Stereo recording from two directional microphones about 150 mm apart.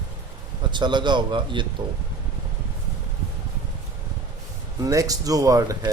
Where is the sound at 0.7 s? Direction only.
30° right (ahead or behind).